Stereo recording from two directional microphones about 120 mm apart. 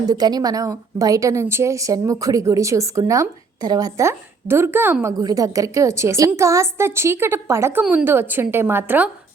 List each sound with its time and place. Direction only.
0.1 s a woman's voice: 35° right (ahead or behind); by 4.9 s 20° right (ahead or behind)
5.2 s a woman's voice: 30° right (ahead or behind)